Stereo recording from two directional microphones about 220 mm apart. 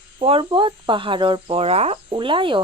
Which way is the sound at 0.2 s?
25° right (ahead or behind).